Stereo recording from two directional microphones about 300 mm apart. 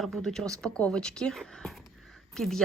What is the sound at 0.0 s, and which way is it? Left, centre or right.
Speech, centre.